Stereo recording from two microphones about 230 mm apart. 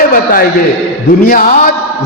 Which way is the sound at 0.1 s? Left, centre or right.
Left.